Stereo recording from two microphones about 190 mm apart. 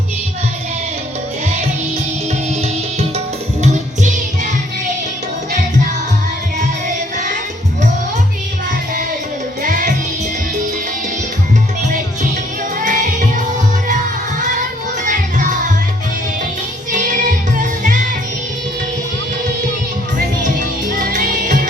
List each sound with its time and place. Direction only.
3.6 s music: 40° right (ahead or behind)
9.6 s music: 45° right (ahead or behind)
12.8 s music: 45° right (ahead or behind)
15.0 s music: 45° right (ahead or behind)
16.9 s music: 45° right (ahead or behind)
20.1 s music: 45° right (ahead or behind)